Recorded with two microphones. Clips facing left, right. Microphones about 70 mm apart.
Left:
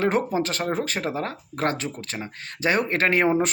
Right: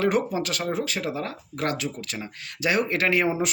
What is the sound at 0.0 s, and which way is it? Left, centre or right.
Speech, left.